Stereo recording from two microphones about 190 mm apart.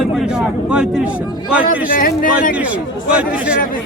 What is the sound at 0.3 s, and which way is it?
Speech, 5° right (ahead or behind).